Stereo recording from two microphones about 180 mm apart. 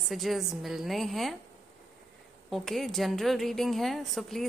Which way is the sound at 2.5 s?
Centre (ahead or behind).